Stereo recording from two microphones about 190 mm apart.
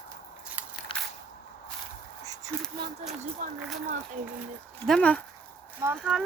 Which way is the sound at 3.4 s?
40° right (ahead or behind).